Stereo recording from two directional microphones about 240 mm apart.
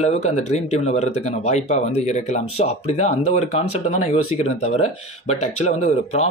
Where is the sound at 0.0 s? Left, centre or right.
Left.